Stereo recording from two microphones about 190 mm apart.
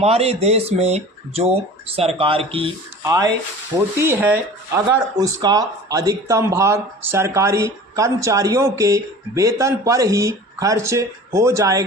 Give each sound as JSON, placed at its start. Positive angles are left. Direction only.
{"t": 0.0, "sound": "speech", "side_deg": -30}